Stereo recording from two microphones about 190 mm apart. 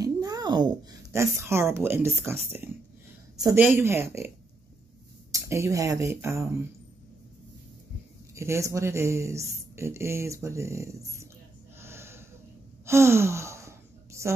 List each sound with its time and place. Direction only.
0.0 s speech: 20° right (ahead or behind)
5.3 s speech: 15° right (ahead or behind)
8.4 s speech: 15° right (ahead or behind)
11.8 s gasp: 15° right (ahead or behind)
12.8 s sigh: 15° right (ahead or behind)